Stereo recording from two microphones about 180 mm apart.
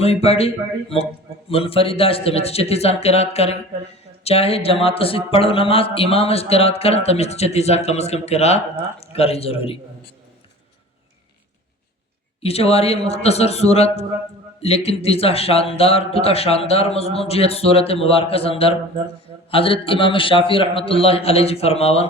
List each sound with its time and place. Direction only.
0.0 s speech: 35° left (ahead or behind)
12.4 s speech: 35° left (ahead or behind)